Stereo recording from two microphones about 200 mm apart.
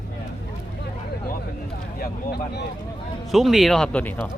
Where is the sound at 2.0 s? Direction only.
50° left (ahead or behind).